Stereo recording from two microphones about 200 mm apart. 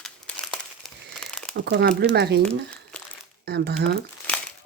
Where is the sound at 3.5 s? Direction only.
55° right (ahead or behind).